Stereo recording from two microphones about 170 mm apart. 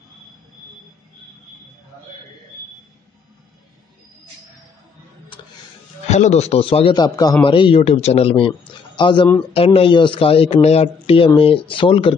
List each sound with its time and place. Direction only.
6.0 s speech: 45° left (ahead or behind)